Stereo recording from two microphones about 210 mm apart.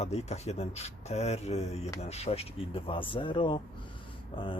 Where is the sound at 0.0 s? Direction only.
30° left (ahead or behind).